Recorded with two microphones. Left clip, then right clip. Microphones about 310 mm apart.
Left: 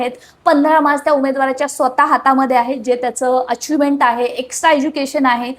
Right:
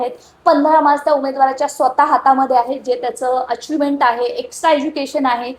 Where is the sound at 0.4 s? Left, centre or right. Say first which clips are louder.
Even; left.